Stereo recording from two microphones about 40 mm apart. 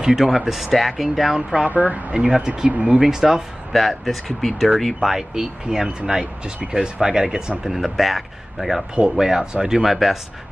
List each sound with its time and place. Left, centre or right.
0.0 s speech: centre
1.7 s speech: right
2.1 s speech: centre
3.7 s speech: centre
5.3 s speech: centre
9.2 s speech: centre
9.8 s speech: centre